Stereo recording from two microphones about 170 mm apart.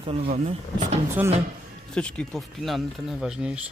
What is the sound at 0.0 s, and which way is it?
Speech, 35° right (ahead or behind).